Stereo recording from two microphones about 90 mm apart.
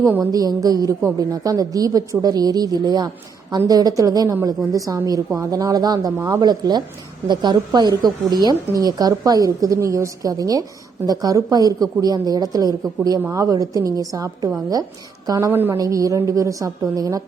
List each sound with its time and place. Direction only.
0.2 s a woman's voice: 45° right (ahead or behind)
15.5 s speech: 25° right (ahead or behind)
15.8 s a woman's voice: 40° right (ahead or behind)